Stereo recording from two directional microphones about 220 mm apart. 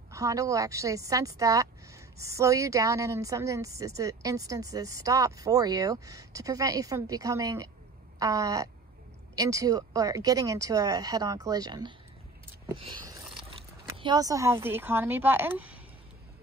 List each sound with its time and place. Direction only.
0.1 s speech: 15° right (ahead or behind)
13.9 s speech: 20° right (ahead or behind)